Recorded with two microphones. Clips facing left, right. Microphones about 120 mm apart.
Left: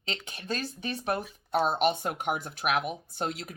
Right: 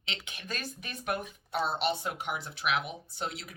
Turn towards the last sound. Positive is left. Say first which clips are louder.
# left 4 dB
turn(degrees=45)  # may be behind; listen again after turning